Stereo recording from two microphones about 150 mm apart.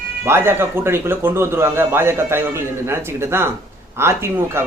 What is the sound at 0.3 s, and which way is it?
Speech, 15° right (ahead or behind).